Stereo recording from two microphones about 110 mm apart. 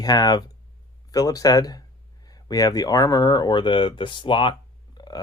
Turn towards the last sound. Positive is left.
turn(degrees=40)  # may be behind; listen again after turning